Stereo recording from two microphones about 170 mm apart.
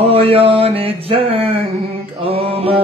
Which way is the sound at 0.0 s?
35° right (ahead or behind).